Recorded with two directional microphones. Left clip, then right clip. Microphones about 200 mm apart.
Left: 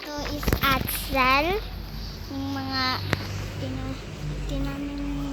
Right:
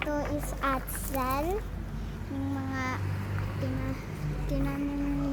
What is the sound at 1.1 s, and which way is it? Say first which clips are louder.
Speech: left 9 dB; 15° left (ahead or behind).